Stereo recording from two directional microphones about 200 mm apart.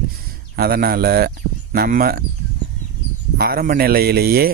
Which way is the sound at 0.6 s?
50° right (ahead or behind).